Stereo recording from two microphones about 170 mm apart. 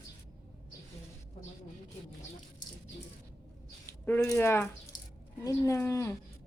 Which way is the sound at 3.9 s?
15° left (ahead or behind).